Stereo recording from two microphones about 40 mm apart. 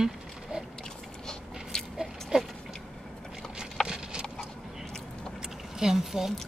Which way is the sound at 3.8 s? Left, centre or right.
Right.